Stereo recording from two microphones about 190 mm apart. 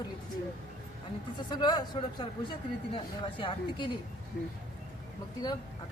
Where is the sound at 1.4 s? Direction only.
20° left (ahead or behind).